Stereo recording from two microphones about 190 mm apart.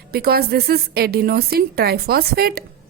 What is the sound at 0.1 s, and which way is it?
A woman's voice, 55° right (ahead or behind).